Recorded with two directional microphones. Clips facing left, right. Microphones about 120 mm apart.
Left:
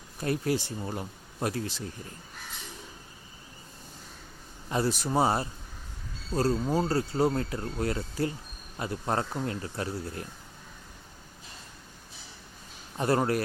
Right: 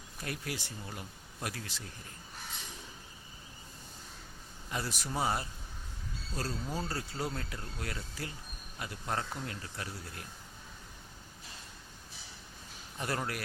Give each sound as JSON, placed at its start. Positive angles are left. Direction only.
{"t": 0.2, "sound": "speech", "side_deg": 30}
{"t": 4.7, "sound": "speech", "side_deg": 30}
{"t": 13.0, "sound": "speech", "side_deg": 35}